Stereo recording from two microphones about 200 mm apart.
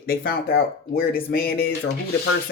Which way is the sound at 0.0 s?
45° left (ahead or behind).